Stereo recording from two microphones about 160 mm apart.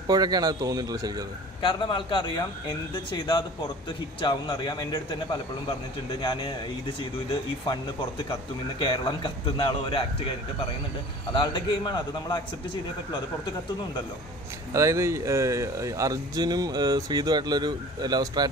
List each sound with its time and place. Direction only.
0.0 s speech: 25° right (ahead or behind)
1.6 s a man's voice: 30° left (ahead or behind)
8.3 s a man's voice: 30° left (ahead or behind)
11.3 s a man's voice: 25° left (ahead or behind)
14.7 s speech: 20° right (ahead or behind)